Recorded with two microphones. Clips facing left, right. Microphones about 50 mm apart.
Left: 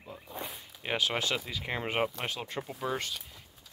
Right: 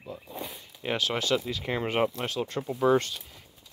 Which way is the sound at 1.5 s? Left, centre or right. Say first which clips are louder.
Right 4 dB; centre.